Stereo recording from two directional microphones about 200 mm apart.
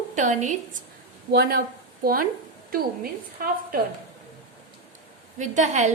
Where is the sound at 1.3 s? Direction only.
50° right (ahead or behind).